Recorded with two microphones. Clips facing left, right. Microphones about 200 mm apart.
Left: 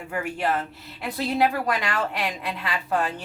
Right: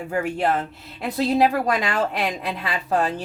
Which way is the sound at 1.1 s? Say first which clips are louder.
Right 4 dB; 40° right (ahead or behind).